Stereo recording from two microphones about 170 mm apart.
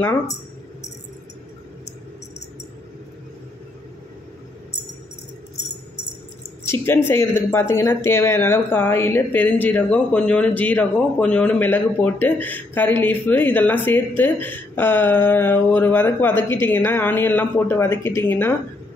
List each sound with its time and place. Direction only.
6.7 s a woman's voice: 15° left (ahead or behind)